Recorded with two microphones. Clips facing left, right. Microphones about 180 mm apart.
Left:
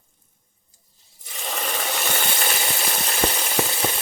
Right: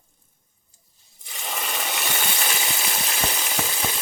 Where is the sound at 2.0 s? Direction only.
50° left (ahead or behind).